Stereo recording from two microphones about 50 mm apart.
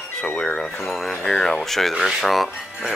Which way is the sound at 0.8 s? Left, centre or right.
Centre.